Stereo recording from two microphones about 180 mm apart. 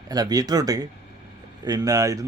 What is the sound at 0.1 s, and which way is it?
Speech, 20° right (ahead or behind).